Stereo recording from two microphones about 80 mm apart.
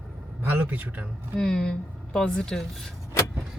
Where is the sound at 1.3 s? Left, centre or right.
Centre.